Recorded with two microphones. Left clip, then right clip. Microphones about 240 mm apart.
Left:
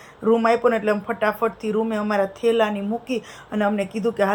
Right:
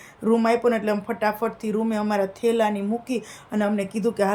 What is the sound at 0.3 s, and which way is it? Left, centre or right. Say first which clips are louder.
Speech: left 2 dB; centre.